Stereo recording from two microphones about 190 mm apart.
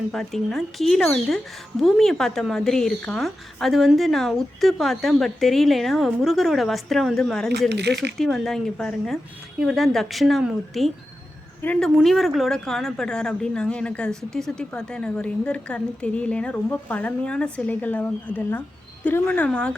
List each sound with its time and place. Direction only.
0.1 s a woman's voice: centre (ahead or behind)
7.7 s speech: 60° right (ahead or behind)
8.2 s a woman's voice: centre (ahead or behind)